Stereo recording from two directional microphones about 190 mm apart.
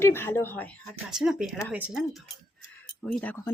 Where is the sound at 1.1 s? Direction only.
Centre (ahead or behind).